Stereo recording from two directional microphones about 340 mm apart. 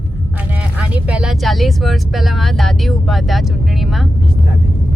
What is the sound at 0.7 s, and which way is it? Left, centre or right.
Speech, centre.